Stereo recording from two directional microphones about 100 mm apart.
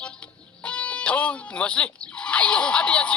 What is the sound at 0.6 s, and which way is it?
Speech, 10° left (ahead or behind).